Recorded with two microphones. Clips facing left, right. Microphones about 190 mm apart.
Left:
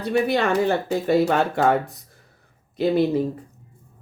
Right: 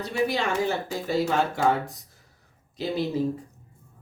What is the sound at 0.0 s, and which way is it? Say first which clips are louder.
Speech: left 5 dB; 60° left (ahead or behind).